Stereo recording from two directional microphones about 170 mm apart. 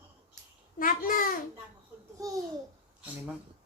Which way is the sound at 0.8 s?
55° left (ahead or behind).